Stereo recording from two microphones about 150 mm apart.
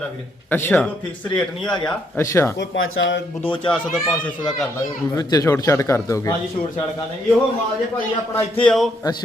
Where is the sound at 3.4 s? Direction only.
35° left (ahead or behind).